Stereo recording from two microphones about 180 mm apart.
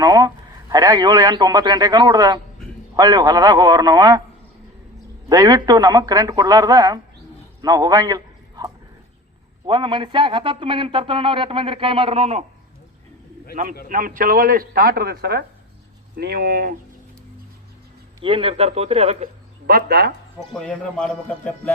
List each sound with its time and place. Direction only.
0.0 s speech: 20° right (ahead or behind)
5.3 s speech: 20° right (ahead or behind)
7.6 s a sound: 20° right (ahead or behind)
9.6 s speech: 25° right (ahead or behind)
13.8 s a man's voice: 50° right (ahead or behind)
18.2 s speech: 30° right (ahead or behind)
19.6 s speech: 60° right (ahead or behind)
20.5 s speech: 5° left (ahead or behind)